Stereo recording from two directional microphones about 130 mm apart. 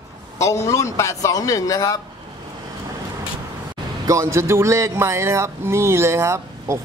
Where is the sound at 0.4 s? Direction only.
25° left (ahead or behind).